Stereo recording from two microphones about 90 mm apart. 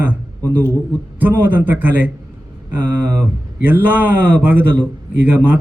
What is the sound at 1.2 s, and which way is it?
Speech, 20° right (ahead or behind).